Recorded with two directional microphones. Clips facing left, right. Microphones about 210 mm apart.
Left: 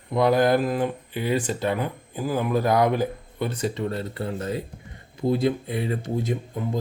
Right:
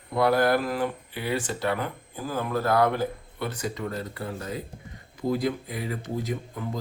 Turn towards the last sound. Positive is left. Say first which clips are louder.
# left 4 dB
turn(degrees=25)  # may be behind; listen again after turning